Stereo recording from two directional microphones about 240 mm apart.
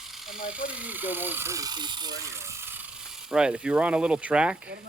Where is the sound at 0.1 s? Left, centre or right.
Centre.